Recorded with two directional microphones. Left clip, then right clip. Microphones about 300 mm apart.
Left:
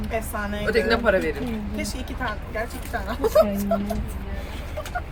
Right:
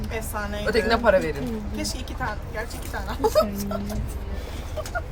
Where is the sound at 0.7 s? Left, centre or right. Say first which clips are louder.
Right 1 dB; centre.